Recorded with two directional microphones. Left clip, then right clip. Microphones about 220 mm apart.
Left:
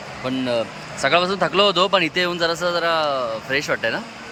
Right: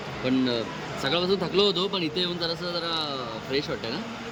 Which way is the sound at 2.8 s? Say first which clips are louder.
Left 10 dB; 10° left (ahead or behind).